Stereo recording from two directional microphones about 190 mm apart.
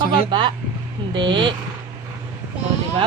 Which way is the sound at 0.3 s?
25° right (ahead or behind).